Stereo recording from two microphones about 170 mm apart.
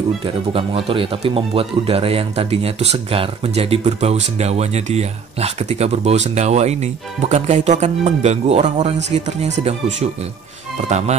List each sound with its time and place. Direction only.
0.2 s speech: 30° right (ahead or behind)